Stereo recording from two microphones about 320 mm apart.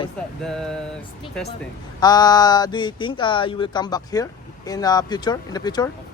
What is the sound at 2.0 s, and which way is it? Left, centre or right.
Speech, centre.